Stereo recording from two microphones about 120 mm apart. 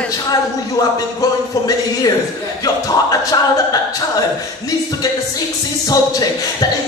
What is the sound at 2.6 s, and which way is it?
Speech, 30° left (ahead or behind).